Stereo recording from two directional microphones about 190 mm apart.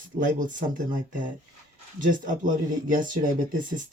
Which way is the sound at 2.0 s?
45° right (ahead or behind).